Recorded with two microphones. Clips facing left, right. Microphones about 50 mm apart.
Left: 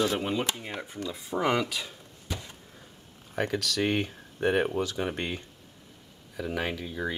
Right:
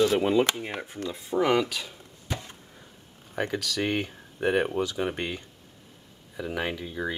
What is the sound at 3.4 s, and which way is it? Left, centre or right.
Speech, centre.